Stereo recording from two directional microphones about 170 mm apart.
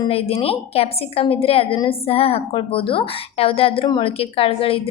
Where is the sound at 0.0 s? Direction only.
35° left (ahead or behind).